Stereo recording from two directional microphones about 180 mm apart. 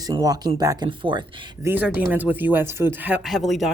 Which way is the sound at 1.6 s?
10° right (ahead or behind).